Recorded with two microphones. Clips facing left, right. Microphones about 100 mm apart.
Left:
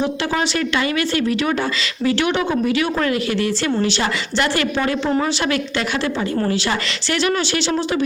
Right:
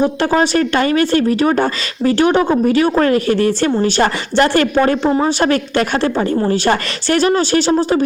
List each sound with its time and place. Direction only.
0.0 s a woman's voice: 45° right (ahead or behind)